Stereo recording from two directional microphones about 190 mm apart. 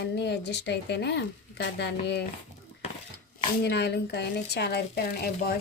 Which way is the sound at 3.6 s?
65° left (ahead or behind).